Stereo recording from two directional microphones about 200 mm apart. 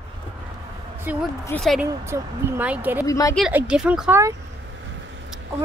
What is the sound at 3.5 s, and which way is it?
Speech, 5° right (ahead or behind).